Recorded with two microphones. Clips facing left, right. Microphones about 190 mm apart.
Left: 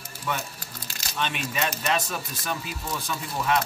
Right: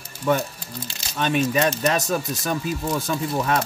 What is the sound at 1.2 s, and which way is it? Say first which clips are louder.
Speech: right 8 dB; 40° right (ahead or behind).